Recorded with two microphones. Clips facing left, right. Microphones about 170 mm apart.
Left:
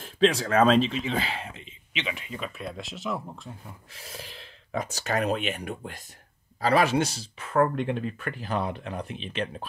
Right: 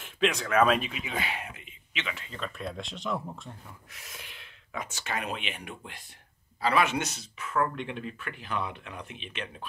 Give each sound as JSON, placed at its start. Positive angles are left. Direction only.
{"t": 0.0, "sound": "speech", "side_deg": 30}
{"t": 3.9, "sound": "speech", "side_deg": 35}